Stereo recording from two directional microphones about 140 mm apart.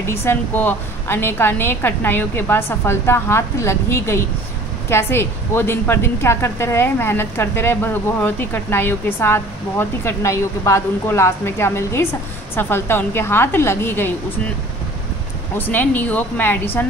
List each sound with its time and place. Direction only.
0.0 s a woman's voice: 20° left (ahead or behind)
15.5 s a woman's voice: 15° left (ahead or behind)